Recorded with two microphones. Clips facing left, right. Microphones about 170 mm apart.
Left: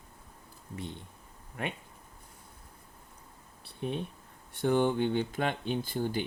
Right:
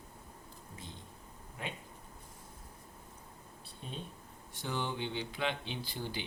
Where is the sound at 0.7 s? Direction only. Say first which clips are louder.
Left 11 dB; 65° left (ahead or behind).